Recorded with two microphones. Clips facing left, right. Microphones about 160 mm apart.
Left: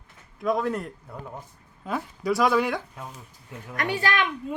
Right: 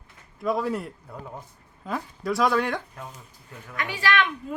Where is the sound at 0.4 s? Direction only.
5° right (ahead or behind).